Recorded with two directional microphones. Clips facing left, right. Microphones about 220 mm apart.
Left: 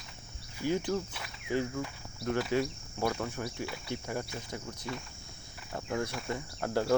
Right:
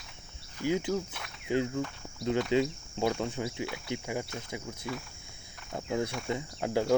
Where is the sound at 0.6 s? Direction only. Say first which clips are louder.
Right 1 dB; 15° right (ahead or behind).